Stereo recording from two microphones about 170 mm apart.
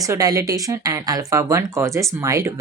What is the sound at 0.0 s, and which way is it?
Speech, 20° right (ahead or behind).